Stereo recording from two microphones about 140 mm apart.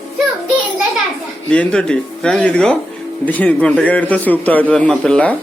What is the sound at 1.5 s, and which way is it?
A man's voice, 5° left (ahead or behind).